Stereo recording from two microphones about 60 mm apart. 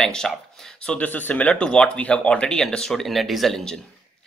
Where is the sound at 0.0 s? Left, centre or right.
Centre.